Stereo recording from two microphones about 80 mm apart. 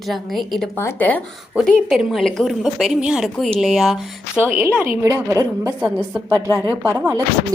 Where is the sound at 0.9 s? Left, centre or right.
Centre.